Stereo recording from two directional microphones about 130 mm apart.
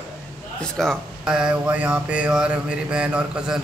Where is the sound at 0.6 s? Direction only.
5° left (ahead or behind).